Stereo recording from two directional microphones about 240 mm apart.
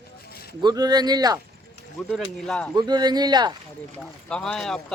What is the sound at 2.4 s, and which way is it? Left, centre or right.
Speech, centre.